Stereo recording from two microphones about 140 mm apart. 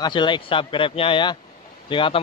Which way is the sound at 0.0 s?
35° left (ahead or behind).